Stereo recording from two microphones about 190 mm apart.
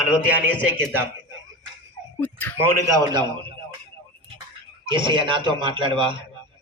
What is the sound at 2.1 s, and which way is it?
Speech, 10° left (ahead or behind).